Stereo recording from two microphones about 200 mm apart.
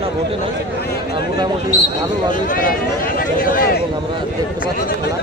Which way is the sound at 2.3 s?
45° left (ahead or behind).